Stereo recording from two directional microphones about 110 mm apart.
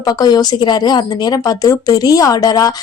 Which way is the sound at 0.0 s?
40° left (ahead or behind).